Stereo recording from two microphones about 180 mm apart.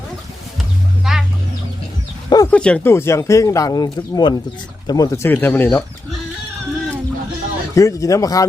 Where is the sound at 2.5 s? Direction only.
5° left (ahead or behind).